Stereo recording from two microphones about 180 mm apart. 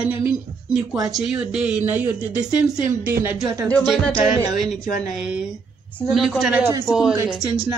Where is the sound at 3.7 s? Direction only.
Centre (ahead or behind).